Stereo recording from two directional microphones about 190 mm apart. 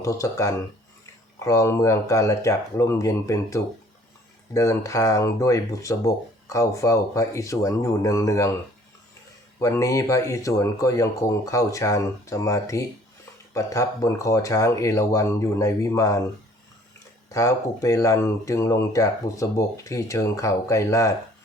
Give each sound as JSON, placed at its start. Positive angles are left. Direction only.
{"t": 0.0, "sound": "speech", "side_deg": 15}
{"t": 9.6, "sound": "speech", "side_deg": 15}
{"t": 17.3, "sound": "speech", "side_deg": 15}